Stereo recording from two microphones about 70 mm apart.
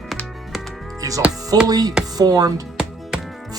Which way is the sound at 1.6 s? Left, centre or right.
Right.